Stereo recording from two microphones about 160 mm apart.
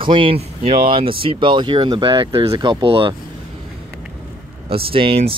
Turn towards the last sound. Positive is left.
turn(degrees=-35)  # may be behind; listen again after turning